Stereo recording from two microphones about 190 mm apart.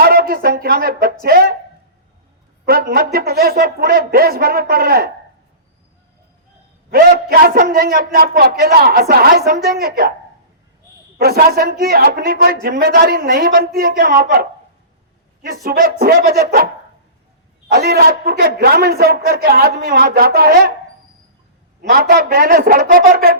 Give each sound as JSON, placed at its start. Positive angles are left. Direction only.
{"t": 0.0, "sound": "a woman's voice", "side_deg": -55}
{"t": 2.6, "sound": "a woman's voice", "side_deg": -55}
{"t": 6.9, "sound": "a woman's voice", "side_deg": -55}
{"t": 11.2, "sound": "a woman's voice", "side_deg": -55}
{"t": 17.7, "sound": "a woman's voice", "side_deg": -55}
{"t": 21.8, "sound": "a woman's voice", "side_deg": -55}